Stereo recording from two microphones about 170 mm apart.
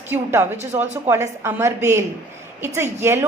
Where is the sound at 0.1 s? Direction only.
15° right (ahead or behind).